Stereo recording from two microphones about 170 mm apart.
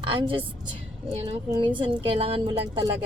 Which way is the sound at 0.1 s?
30° right (ahead or behind).